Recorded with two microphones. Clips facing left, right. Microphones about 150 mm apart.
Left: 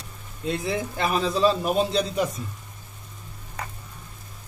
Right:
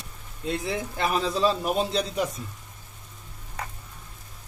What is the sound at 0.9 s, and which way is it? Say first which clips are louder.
Speech: even; 90° left.